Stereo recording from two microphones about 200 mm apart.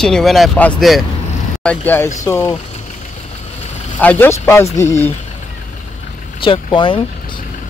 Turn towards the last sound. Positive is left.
turn(degrees=25)  # may be behind; listen again after turning